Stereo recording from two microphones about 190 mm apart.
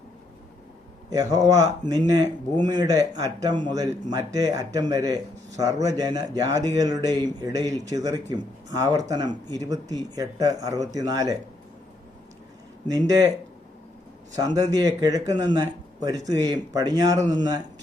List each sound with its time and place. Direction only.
1.1 s speech: 20° right (ahead or behind)
12.9 s speech: 20° right (ahead or behind)
14.3 s speech: 20° right (ahead or behind)